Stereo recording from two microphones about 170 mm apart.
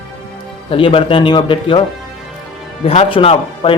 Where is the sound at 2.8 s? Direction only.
35° left (ahead or behind).